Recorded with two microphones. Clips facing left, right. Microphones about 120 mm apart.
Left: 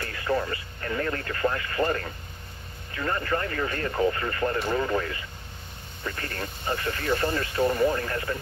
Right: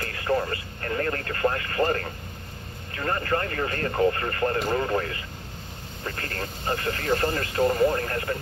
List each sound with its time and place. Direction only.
0.0 s speech: 40° right (ahead or behind)